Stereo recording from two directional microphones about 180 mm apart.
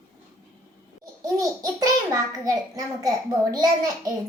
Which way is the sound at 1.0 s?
20° right (ahead or behind).